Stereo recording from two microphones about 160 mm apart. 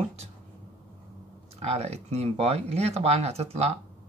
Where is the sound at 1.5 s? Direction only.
40° right (ahead or behind).